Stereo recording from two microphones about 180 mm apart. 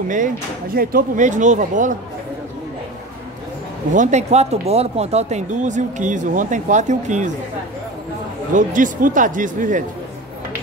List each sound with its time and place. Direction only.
0.7 s speech: 50° right (ahead or behind)
3.9 s speech: 40° right (ahead or behind)
8.5 s speech: 45° right (ahead or behind)